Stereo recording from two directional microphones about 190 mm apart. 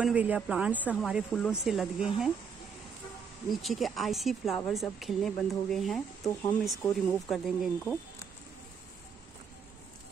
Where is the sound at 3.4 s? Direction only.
Centre (ahead or behind).